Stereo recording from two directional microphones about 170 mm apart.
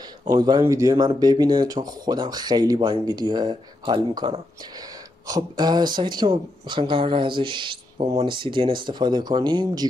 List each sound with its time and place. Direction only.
0.2 s speech: 25° right (ahead or behind)